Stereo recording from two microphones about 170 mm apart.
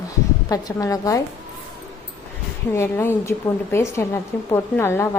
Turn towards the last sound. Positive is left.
turn(degrees=15)  # may be behind; listen again after turning